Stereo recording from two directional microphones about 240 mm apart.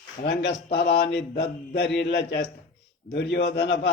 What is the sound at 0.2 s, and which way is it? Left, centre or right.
A man's voice, left.